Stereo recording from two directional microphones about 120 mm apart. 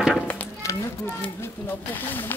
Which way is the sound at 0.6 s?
25° left (ahead or behind).